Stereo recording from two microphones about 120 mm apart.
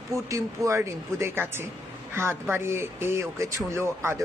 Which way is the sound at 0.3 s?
25° right (ahead or behind).